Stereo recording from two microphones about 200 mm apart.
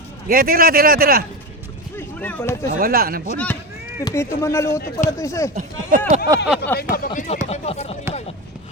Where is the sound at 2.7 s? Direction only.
45° right (ahead or behind).